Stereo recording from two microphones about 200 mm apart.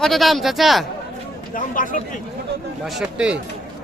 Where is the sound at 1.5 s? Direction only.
40° left (ahead or behind).